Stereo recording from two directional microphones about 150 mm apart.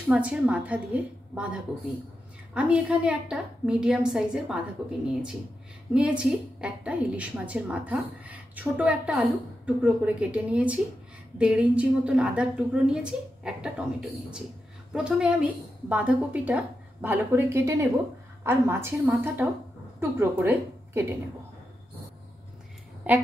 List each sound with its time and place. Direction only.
0.1 s a woman's voice: 5° right (ahead or behind)
14.9 s a woman's voice: 5° right (ahead or behind)
23.1 s a woman's voice: 10° right (ahead or behind)